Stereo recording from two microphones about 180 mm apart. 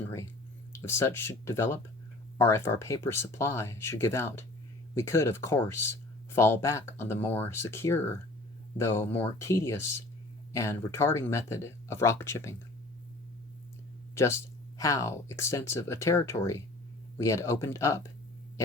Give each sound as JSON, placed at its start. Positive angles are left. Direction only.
{"t": 0.7, "sound": "speech", "side_deg": 15}
{"t": 14.8, "sound": "speech", "side_deg": 15}